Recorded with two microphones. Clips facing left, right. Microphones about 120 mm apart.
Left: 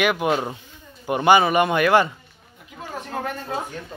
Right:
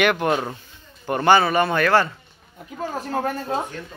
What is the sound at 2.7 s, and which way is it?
Speech, 35° right (ahead or behind).